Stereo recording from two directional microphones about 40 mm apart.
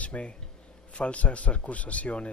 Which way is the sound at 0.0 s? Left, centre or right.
Left.